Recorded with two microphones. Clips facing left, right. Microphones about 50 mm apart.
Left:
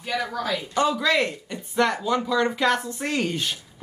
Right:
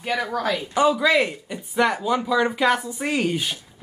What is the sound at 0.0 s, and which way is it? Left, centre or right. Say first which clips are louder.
Speech: right 3 dB; right.